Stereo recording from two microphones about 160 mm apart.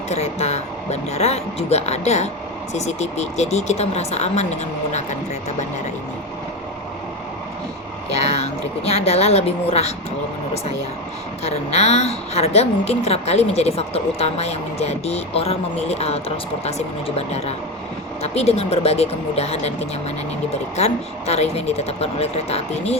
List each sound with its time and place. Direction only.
0.1 s speech: 45° left (ahead or behind)
8.1 s a woman's voice: 40° left (ahead or behind)
11.4 s a woman's voice: 40° left (ahead or behind)